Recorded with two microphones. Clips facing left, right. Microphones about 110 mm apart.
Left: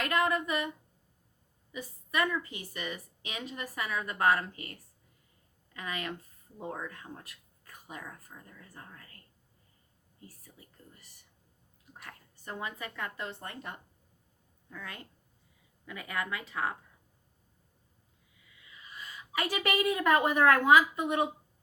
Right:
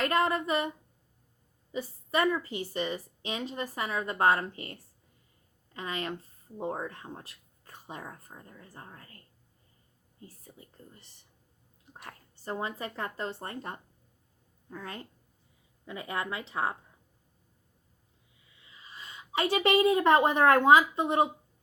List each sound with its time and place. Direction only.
0.0 s speech: 30° right (ahead or behind)
1.7 s speech: 30° right (ahead or behind)
10.2 s speech: 25° right (ahead or behind)
18.4 s a woman's voice: 30° right (ahead or behind)